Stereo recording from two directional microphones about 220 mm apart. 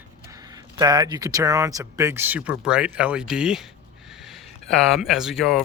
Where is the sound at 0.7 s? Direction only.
20° right (ahead or behind).